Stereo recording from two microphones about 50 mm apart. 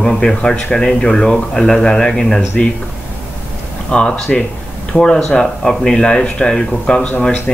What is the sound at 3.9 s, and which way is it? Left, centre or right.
Speech, left.